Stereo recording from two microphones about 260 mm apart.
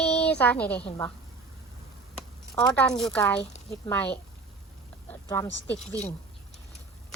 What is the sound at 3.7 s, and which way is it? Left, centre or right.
Speech, centre.